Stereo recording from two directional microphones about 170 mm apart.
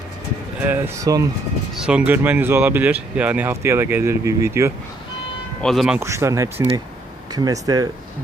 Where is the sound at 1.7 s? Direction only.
5° right (ahead or behind).